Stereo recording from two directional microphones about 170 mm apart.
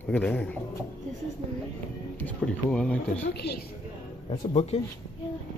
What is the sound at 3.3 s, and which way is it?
Speech, 75° left (ahead or behind).